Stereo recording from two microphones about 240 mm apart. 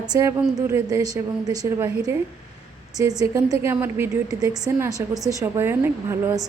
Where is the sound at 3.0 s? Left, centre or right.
Centre.